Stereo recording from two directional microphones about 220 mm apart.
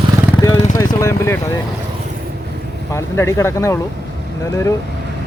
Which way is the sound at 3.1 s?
10° left (ahead or behind).